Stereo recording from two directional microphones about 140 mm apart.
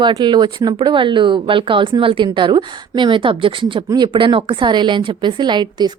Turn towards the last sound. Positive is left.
turn(degrees=-35)  # may be behind; listen again after turning